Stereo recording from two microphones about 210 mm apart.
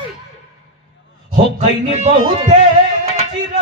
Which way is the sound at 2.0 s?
30° right (ahead or behind).